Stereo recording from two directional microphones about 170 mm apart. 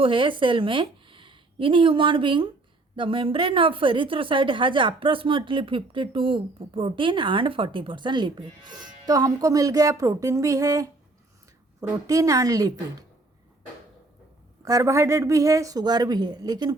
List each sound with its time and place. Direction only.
0.0 s a woman's voice: 30° right (ahead or behind)
14.6 s a woman's voice: 20° right (ahead or behind)